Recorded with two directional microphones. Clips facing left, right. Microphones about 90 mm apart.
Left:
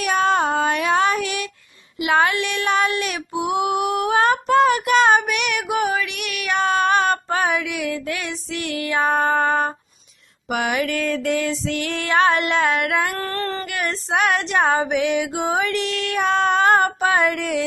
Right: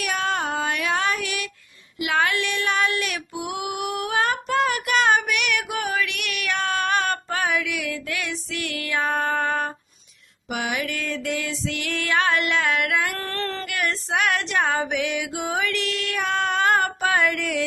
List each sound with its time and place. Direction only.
0.0 s child singing: 30° left (ahead or behind)
2.0 s music: 25° left (ahead or behind)
2.3 s female singing: 15° left (ahead or behind)
10.5 s music: 55° left (ahead or behind); by 13.1 s 35° left (ahead or behind)
13.2 s music: 10° left (ahead or behind)
13.7 s music: 25° left (ahead or behind)